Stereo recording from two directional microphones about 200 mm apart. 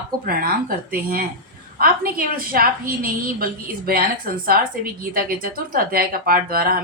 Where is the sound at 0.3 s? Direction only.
45° right (ahead or behind).